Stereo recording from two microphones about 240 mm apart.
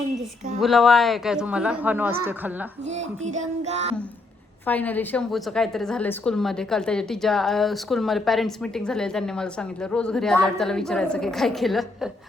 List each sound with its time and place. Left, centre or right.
0.6 s a woman's voice: centre
2.9 s a sound: right
4.6 s a woman's voice: centre